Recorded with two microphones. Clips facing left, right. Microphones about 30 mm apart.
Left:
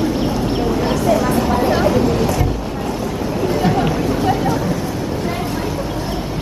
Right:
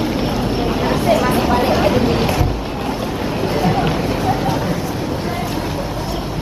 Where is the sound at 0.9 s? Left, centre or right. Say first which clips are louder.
Right 2 dB; right.